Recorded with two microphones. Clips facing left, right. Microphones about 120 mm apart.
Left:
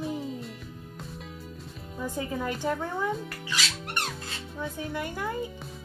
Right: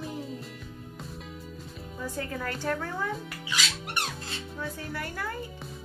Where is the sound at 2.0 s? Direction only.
15° left (ahead or behind).